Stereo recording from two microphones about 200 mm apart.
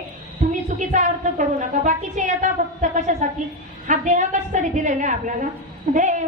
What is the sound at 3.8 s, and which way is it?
A woman's voice, 40° right (ahead or behind).